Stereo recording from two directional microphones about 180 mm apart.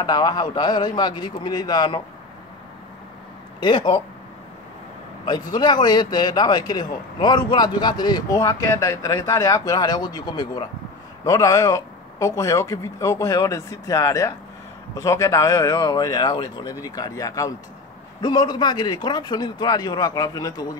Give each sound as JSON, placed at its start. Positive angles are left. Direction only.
{"t": 0.0, "sound": "speech", "side_deg": 25}
{"t": 3.6, "sound": "speech", "side_deg": 25}
{"t": 5.2, "sound": "speech", "side_deg": 25}